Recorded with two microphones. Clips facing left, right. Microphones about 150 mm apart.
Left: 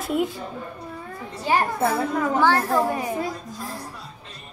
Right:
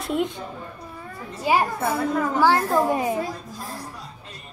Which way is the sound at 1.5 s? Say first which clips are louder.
Right 1 dB; 10° right (ahead or behind).